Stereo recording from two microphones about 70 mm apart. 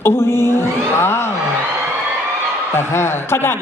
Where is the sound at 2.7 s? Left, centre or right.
Left.